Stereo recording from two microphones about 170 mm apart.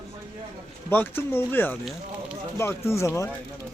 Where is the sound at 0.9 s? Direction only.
10° left (ahead or behind).